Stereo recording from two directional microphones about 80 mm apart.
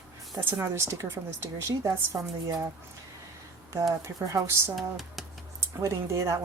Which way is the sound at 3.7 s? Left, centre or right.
Right.